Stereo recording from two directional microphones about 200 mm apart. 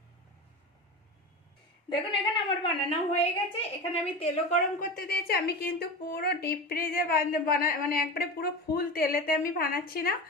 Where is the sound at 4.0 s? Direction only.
35° left (ahead or behind).